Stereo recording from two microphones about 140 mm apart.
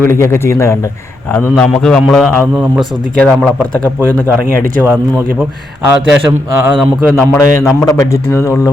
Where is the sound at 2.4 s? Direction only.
10° right (ahead or behind).